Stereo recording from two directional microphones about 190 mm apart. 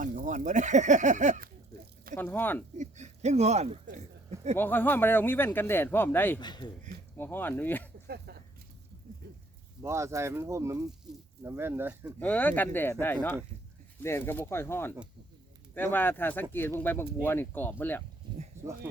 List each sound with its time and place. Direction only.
0.0 s speech: 40° right (ahead or behind)
2.1 s speech: 10° left (ahead or behind)
2.7 s speech: 40° right (ahead or behind)
4.5 s speech: 10° left (ahead or behind)
6.4 s speech: 25° left (ahead or behind)
7.2 s speech: 10° left (ahead or behind)
8.0 s a sound: 55° right (ahead or behind)
9.8 s speech: 15° right (ahead or behind)
12.2 s speech: 10° left (ahead or behind)
18.5 s a sound: 15° right (ahead or behind)